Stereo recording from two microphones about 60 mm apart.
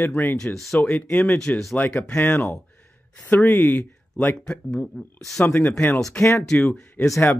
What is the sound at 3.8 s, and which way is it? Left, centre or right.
Speech, left.